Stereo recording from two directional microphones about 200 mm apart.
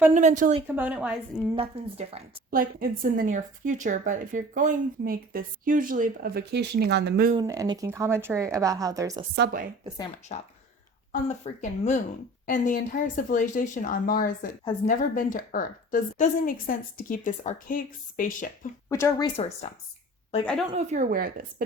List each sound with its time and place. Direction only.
0.1 s a woman's voice: 35° right (ahead or behind)
0.8 s a woman's voice: 5° right (ahead or behind)
1.5 s speech: 30° right (ahead or behind)
2.5 s speech: 45° right (ahead or behind)
7.3 s a woman's voice: 15° right (ahead or behind)
9.3 s speech: 50° right (ahead or behind)
10.3 s a woman's voice: 35° left (ahead or behind)
18.9 s speech: 15° left (ahead or behind)
20.4 s a woman's voice: 5° left (ahead or behind)
20.7 s speech: 40° right (ahead or behind)